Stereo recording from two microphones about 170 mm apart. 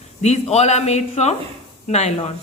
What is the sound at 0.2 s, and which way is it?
A woman's voice, 40° left (ahead or behind).